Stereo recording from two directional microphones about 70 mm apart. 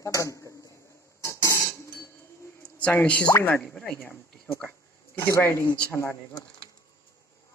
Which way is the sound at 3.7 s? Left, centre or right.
Centre.